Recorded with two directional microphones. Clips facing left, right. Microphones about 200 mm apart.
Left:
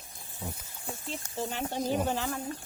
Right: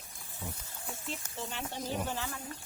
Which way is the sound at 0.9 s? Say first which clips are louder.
Left 3 dB; 40° left (ahead or behind).